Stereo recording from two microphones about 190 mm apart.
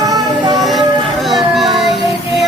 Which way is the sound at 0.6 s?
Centre (ahead or behind).